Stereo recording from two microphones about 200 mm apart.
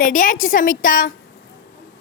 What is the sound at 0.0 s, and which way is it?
A woman's voice, 45° left (ahead or behind).